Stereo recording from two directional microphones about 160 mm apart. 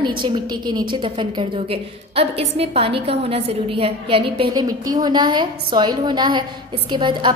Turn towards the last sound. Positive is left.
turn(degrees=-30)  # may be behind; listen again after turning